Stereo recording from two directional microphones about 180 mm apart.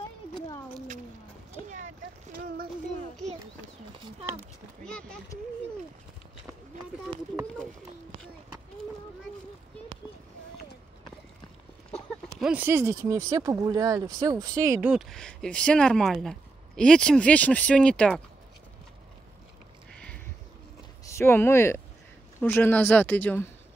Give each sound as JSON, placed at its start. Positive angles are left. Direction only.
{"t": 2.4, "sound": "a sound", "side_deg": -55}
{"t": 4.8, "sound": "speech", "side_deg": 5}
{"t": 12.4, "sound": "speech", "side_deg": -5}
{"t": 14.9, "sound": "speech", "side_deg": 0}
{"t": 19.9, "sound": "a sound", "side_deg": 5}
{"t": 21.0, "sound": "speech", "side_deg": 15}